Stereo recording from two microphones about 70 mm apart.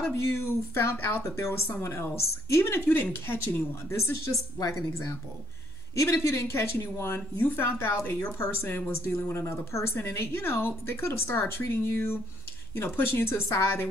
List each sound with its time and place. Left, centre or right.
0.1 s speech: left
0.9 s speech: left
1.2 s speech: left
4.6 s speech: left